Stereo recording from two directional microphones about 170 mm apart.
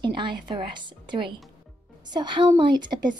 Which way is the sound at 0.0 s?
30° right (ahead or behind).